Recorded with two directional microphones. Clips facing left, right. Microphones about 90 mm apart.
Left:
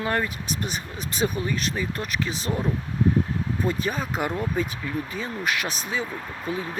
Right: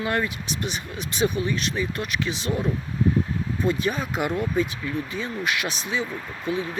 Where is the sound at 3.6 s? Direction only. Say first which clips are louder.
Right 3 dB; 40° left (ahead or behind).